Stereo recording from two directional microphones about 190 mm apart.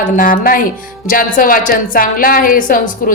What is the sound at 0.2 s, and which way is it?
A woman's voice, 45° left (ahead or behind).